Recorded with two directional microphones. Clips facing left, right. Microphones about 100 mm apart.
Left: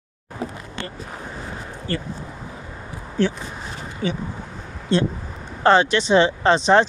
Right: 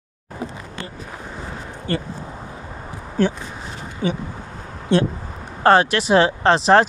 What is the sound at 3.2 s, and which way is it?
Speech, 45° right (ahead or behind).